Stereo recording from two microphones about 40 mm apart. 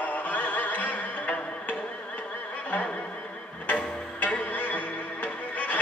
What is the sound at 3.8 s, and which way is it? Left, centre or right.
Music, left.